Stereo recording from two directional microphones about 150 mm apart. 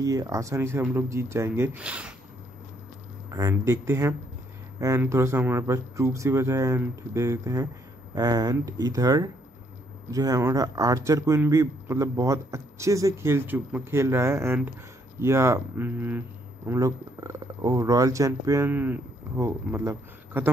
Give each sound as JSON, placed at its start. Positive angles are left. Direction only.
{"t": 0.0, "sound": "speech", "side_deg": -20}
{"t": 3.3, "sound": "speech", "side_deg": -20}